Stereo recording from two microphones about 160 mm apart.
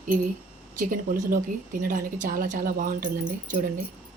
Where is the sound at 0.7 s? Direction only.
60° right (ahead or behind).